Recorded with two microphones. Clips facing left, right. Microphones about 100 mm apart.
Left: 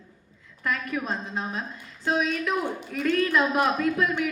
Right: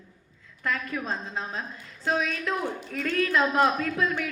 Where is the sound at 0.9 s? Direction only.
20° left (ahead or behind).